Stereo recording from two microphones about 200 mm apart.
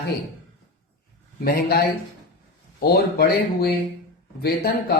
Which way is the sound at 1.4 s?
50° left (ahead or behind).